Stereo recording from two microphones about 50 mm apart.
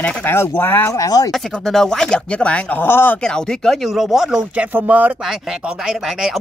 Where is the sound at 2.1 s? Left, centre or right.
Left.